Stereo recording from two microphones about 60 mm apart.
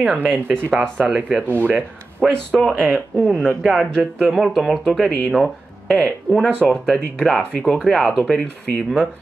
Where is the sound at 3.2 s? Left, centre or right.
Centre.